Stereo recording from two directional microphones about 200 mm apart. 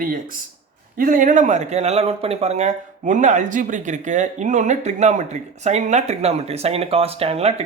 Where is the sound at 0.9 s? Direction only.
45° right (ahead or behind).